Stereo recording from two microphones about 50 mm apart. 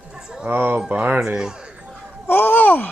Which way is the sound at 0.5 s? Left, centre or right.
Right.